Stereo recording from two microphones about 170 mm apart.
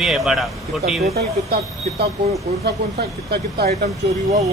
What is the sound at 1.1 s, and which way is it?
Speech, 65° right (ahead or behind).